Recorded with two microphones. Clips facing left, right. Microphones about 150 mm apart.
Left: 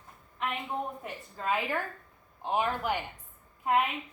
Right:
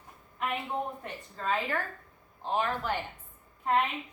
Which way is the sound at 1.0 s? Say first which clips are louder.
Even; 10° left (ahead or behind).